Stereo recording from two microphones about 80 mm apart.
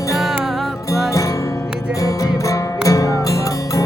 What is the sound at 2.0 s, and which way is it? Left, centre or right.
Music, left.